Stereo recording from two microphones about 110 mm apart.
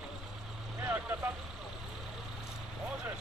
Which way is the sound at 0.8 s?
15° right (ahead or behind).